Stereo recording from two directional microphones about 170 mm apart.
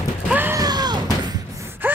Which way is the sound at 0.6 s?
25° right (ahead or behind).